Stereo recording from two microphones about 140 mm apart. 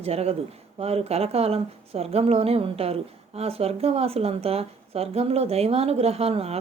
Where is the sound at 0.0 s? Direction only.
45° right (ahead or behind).